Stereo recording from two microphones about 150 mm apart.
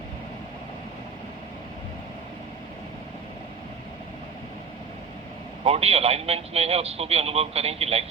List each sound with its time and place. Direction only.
5.6 s a man's voice: 40° right (ahead or behind)